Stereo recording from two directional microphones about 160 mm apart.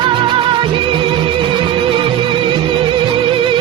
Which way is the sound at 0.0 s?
30° right (ahead or behind).